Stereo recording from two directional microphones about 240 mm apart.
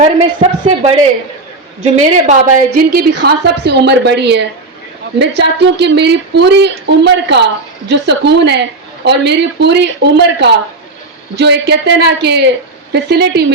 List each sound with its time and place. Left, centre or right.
0.4 s a woman's voice: right
2.7 s speech: right